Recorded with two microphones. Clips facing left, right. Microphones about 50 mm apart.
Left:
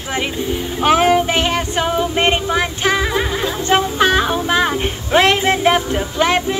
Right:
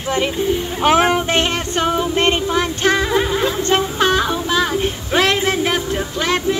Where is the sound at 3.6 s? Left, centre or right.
Centre.